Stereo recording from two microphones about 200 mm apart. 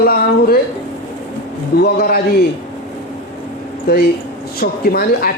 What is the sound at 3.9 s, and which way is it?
A man's voice, 50° left (ahead or behind).